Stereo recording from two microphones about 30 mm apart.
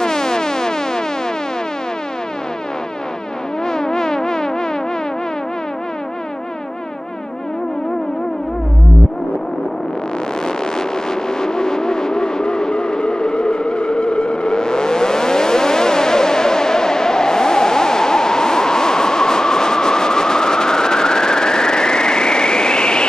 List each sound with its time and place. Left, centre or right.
0.0 s music: left
3.6 s a sound: left
10.4 s vehicle: left